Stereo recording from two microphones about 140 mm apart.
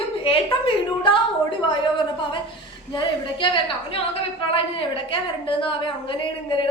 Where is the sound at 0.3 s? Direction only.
40° left (ahead or behind).